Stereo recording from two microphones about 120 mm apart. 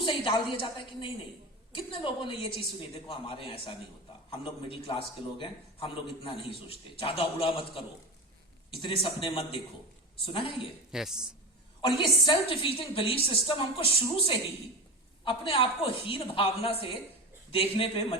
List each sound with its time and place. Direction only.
0.0 s a man's voice: 45° left (ahead or behind)
10.9 s speech: 5° right (ahead or behind)
11.8 s a man's voice: 45° left (ahead or behind)
15.2 s a man's voice: 50° left (ahead or behind)